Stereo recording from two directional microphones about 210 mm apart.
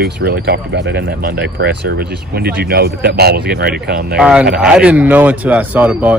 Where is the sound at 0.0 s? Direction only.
50° right (ahead or behind).